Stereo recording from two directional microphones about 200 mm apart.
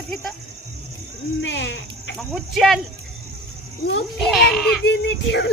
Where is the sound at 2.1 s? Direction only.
Centre (ahead or behind).